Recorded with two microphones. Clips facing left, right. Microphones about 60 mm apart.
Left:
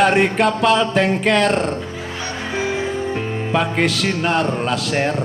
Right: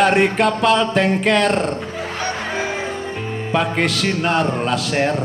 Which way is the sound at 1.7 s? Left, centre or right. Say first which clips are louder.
Right 2 dB; right.